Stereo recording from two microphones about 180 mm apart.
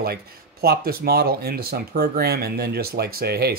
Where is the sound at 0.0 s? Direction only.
60° right (ahead or behind).